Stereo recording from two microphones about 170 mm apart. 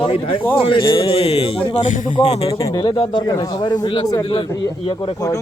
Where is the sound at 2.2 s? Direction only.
35° left (ahead or behind).